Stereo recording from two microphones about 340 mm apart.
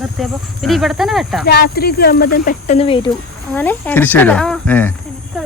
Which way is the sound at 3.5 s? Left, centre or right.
Centre.